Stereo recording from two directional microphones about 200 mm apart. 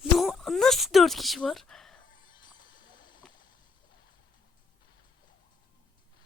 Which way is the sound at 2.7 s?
40° left (ahead or behind).